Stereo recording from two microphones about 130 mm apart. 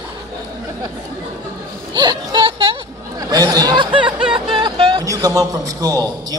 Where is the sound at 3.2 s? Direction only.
30° right (ahead or behind).